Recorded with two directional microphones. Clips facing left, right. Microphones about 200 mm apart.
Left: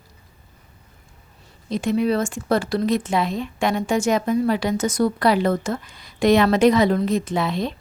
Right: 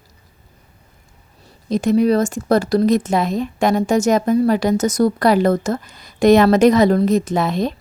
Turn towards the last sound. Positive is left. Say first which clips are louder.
# right 4 dB
turn(degrees=-45)  # may be behind; listen again after turning